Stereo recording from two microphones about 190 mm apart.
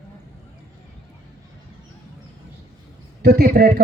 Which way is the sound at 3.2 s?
55° right (ahead or behind).